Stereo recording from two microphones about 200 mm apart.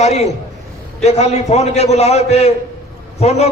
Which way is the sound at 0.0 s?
35° left (ahead or behind).